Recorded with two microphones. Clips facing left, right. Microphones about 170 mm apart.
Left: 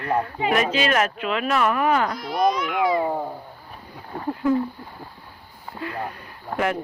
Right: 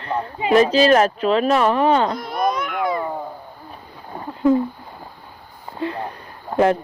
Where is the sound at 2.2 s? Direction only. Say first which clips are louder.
Even; 55° right (ahead or behind).